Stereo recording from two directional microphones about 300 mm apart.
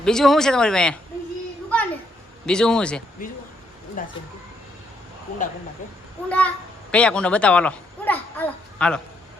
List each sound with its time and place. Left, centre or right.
0.0 s speech: centre
2.5 s speech: centre
3.2 s speech: left
6.2 s a child's voice: centre